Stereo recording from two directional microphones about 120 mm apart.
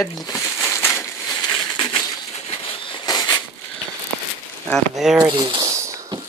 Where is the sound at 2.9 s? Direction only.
35° left (ahead or behind).